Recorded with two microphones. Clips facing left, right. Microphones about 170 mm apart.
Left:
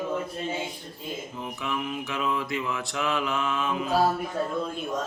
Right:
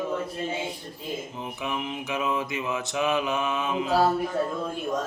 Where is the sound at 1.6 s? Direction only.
20° right (ahead or behind).